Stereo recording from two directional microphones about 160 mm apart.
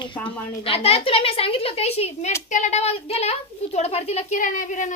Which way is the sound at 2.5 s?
50° left (ahead or behind).